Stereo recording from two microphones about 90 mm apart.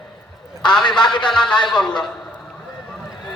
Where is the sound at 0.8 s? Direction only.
55° left (ahead or behind).